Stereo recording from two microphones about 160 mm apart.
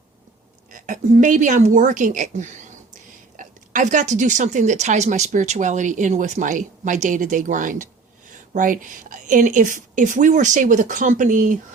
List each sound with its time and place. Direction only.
0.7 s a woman's voice: 55° right (ahead or behind)